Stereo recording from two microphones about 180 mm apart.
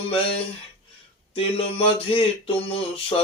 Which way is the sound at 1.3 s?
30° left (ahead or behind).